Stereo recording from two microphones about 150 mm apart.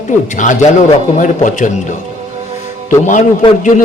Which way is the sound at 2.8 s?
55° left (ahead or behind).